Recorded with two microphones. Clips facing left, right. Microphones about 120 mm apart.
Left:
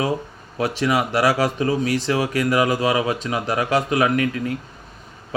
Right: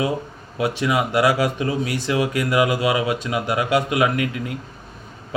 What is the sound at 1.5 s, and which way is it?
Speech, 40° left (ahead or behind).